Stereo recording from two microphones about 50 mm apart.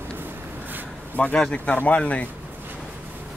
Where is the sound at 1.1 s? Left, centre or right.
Left.